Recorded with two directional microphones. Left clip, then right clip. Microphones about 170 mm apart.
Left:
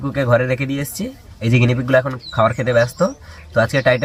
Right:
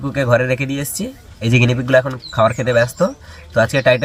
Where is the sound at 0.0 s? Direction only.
Centre (ahead or behind).